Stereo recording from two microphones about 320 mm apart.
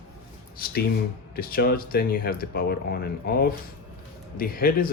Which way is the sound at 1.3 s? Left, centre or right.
Left.